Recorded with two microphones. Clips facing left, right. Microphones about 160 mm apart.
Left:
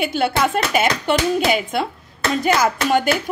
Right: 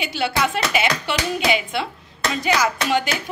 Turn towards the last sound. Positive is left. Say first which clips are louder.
# left 4 dB
turn(degrees=50)  # may be behind; listen again after turning